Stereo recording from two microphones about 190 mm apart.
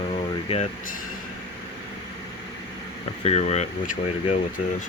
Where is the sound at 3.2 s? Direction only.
35° left (ahead or behind).